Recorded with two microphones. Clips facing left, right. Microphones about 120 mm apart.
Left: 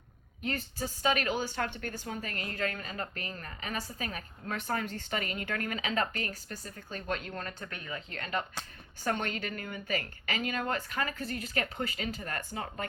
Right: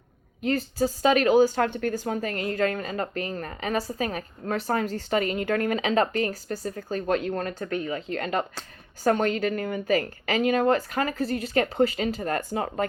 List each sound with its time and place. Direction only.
0.4 s a woman's voice: 35° right (ahead or behind)